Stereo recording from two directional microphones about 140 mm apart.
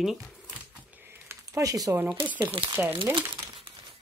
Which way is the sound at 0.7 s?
10° right (ahead or behind).